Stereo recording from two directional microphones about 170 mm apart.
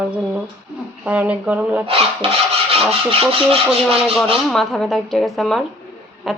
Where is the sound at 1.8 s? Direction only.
35° right (ahead or behind).